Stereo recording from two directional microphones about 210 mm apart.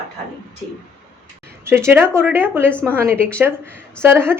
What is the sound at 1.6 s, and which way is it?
Speech, 10° right (ahead or behind).